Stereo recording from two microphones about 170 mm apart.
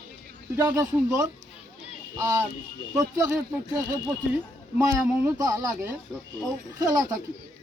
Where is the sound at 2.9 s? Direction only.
5° right (ahead or behind).